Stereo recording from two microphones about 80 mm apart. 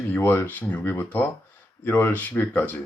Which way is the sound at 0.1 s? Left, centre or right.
Left.